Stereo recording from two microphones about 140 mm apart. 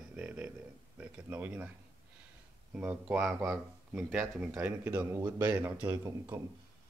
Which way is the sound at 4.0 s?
5° right (ahead or behind).